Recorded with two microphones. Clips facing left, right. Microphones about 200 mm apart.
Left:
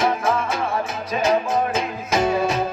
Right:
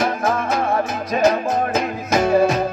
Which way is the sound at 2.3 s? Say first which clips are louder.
Right 8 dB; 50° right (ahead or behind).